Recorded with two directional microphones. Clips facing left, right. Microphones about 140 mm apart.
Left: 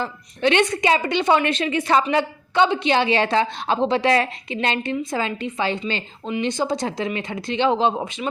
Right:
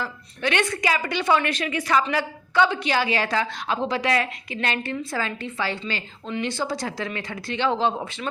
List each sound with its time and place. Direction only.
0.0 s a woman's voice: 20° left (ahead or behind)